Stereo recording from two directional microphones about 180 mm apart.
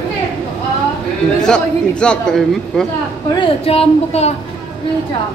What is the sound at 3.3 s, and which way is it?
Speech, 30° left (ahead or behind).